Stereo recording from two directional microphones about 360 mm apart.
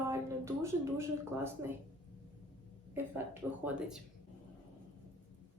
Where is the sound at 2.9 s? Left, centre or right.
Centre.